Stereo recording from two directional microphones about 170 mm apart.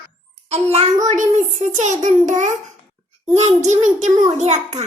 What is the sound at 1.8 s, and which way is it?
A child's voice, 45° right (ahead or behind).